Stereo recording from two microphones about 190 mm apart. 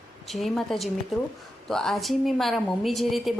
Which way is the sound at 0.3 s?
Centre (ahead or behind).